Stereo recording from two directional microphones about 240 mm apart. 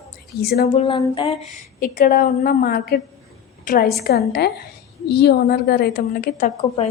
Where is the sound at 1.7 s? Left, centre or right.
Left.